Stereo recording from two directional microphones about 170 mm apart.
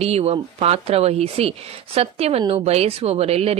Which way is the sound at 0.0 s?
35° right (ahead or behind).